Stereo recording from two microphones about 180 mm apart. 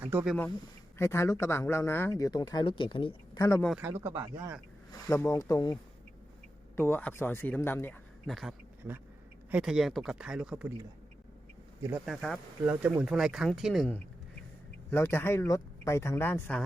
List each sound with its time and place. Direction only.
0.0 s speech: 10° right (ahead or behind)
0.9 s speech: 15° left (ahead or behind)
3.8 s speech: 15° right (ahead or behind)
5.0 s speech: 15° left (ahead or behind)
6.7 s speech: 10° left (ahead or behind)
8.3 s speech: centre (ahead or behind)
11.8 s speech: 10° right (ahead or behind)
12.0 s speech: centre (ahead or behind)
14.8 s speech: 10° left (ahead or behind)